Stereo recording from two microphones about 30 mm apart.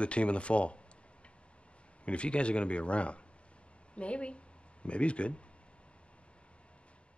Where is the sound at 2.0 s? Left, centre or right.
Left.